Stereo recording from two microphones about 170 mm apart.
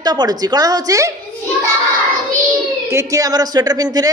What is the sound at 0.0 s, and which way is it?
A woman's voice, 25° right (ahead or behind).